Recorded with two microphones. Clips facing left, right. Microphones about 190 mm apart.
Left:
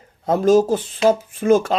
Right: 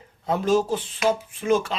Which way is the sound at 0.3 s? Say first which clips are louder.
Left 7 dB; 40° left (ahead or behind).